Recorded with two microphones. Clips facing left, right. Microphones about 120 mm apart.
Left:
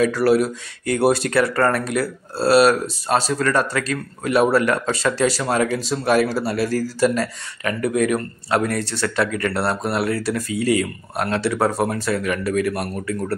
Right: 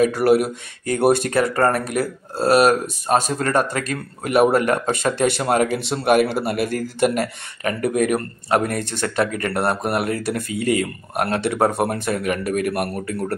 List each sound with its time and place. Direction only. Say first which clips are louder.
0.0 s speech: right 1 dB; 50° right (ahead or behind)
5.8 s speech: right 1 dB; 60° right (ahead or behind)
7.8 s speech: even; 50° right (ahead or behind)
10.5 s speech: left 1 dB; 35° left (ahead or behind)
10.8 s speech: right 1 dB; 50° right (ahead or behind)